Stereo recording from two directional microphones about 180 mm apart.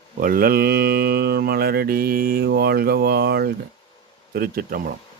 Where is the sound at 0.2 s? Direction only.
55° right (ahead or behind).